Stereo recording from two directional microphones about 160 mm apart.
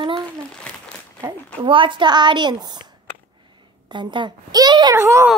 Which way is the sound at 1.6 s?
30° right (ahead or behind).